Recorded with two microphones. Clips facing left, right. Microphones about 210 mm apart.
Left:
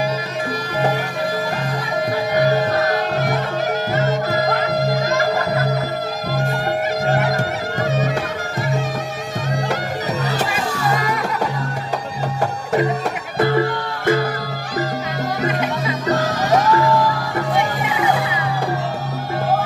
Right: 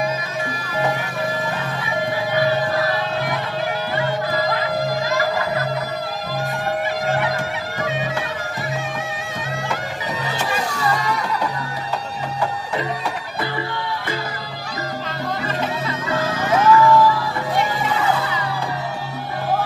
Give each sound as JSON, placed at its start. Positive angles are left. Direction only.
{"t": 2.3, "sound": "music", "side_deg": 40}
{"t": 7.1, "sound": "music", "side_deg": 45}
{"t": 12.4, "sound": "music", "side_deg": 50}
{"t": 16.1, "sound": "music", "side_deg": 40}
{"t": 17.8, "sound": "music", "side_deg": 15}